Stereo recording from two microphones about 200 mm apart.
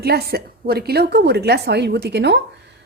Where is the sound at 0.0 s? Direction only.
50° right (ahead or behind).